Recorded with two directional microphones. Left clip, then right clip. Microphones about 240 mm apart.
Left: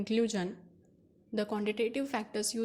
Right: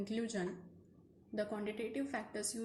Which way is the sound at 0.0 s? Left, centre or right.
Left.